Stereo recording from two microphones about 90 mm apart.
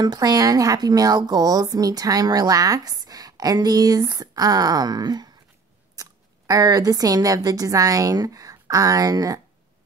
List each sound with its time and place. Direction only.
0.0 s a woman's voice: 45° right (ahead or behind)